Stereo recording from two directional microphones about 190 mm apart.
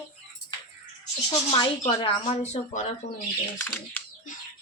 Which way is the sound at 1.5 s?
30° left (ahead or behind).